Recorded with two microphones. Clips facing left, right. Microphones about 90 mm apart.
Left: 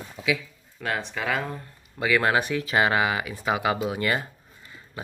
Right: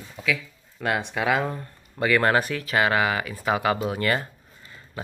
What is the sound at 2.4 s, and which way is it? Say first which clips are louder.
Speech: even; 20° left (ahead or behind).